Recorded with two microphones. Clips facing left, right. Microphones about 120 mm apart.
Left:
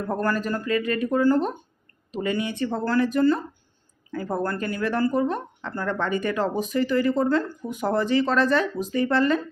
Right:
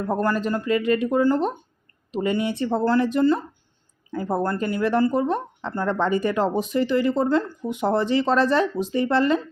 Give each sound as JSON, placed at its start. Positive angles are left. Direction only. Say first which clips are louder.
{"t": 0.1, "sound": "speech", "louder": "right 2 dB", "side_deg": -20}